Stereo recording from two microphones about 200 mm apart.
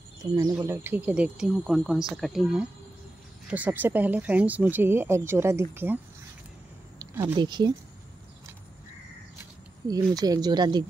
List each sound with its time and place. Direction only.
0.2 s speech: 15° right (ahead or behind)
7.0 s speech: 15° right (ahead or behind)
10.1 s speech: 20° right (ahead or behind)